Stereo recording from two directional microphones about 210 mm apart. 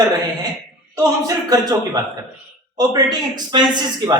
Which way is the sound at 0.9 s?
15° right (ahead or behind).